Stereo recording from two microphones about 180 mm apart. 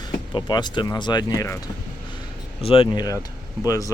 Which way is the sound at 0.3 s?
25° left (ahead or behind).